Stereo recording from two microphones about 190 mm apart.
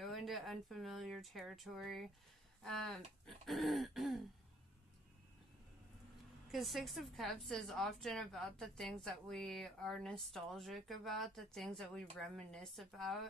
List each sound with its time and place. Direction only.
0.0 s a woman's voice: centre (ahead or behind)
6.5 s a woman's voice: centre (ahead or behind)